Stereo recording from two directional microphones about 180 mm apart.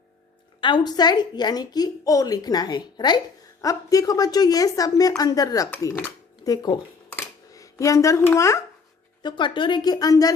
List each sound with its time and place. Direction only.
0.6 s a woman's voice: 25° left (ahead or behind)
7.1 s dishes: 15° left (ahead or behind)
9.2 s a woman's voice: 25° left (ahead or behind)